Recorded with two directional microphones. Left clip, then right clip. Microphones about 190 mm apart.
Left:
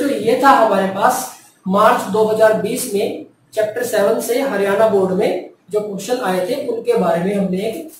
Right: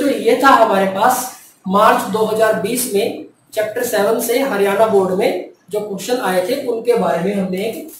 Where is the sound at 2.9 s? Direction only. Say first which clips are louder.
Right 2 dB; centre (ahead or behind).